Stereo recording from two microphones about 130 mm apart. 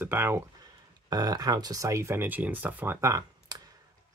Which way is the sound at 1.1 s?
30° right (ahead or behind).